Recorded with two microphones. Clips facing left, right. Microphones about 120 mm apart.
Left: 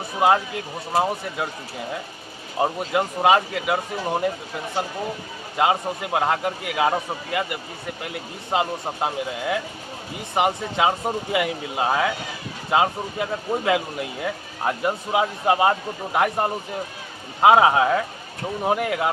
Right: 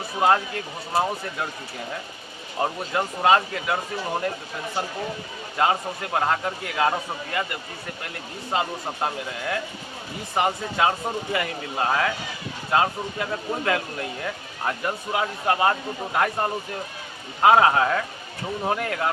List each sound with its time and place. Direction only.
0.2 s speech: 10° left (ahead or behind)
2.6 s speech: 15° left (ahead or behind)
5.5 s speech: 10° left (ahead or behind)
8.5 s speech: 15° left (ahead or behind)